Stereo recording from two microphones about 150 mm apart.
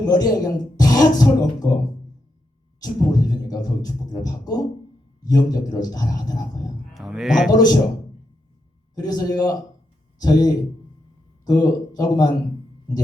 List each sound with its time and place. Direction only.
0.0 s speech: 25° left (ahead or behind)
2.8 s speech: 25° left (ahead or behind)
6.9 s a man's voice: centre (ahead or behind)
7.5 s speech: 25° left (ahead or behind)
9.0 s speech: 25° left (ahead or behind)